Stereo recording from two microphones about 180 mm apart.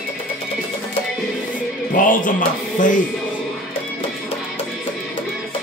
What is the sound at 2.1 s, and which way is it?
Music, 45° left (ahead or behind).